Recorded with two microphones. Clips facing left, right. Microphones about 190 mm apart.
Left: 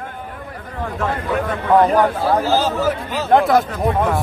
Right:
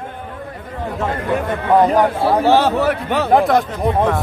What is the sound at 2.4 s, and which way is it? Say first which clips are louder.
Speech: right 4 dB; 65° right (ahead or behind).